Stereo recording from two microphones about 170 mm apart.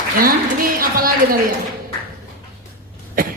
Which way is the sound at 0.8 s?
55° right (ahead or behind).